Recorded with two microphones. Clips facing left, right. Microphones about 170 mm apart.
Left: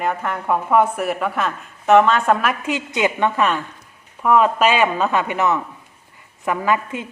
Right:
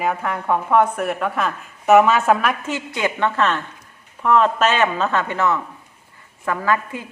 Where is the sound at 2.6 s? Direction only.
15° left (ahead or behind).